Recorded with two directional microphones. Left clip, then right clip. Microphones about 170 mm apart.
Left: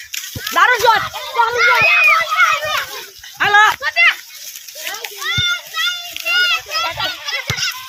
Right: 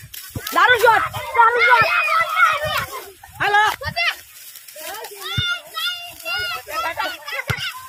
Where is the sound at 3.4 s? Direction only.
20° right (ahead or behind).